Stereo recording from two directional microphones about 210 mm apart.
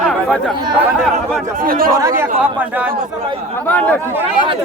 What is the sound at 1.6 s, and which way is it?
Speech, 45° right (ahead or behind).